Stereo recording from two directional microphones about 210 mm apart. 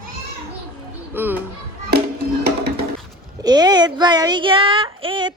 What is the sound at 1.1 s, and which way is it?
Speech, 10° right (ahead or behind).